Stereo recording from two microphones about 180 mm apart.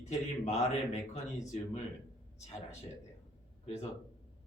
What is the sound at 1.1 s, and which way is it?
Speech, 40° left (ahead or behind).